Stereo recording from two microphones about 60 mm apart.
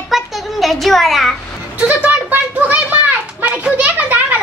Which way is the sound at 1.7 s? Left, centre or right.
Right.